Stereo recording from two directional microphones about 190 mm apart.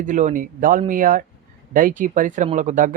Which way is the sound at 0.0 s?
40° right (ahead or behind).